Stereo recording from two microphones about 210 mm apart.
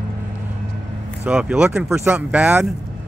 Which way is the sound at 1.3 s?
5° right (ahead or behind).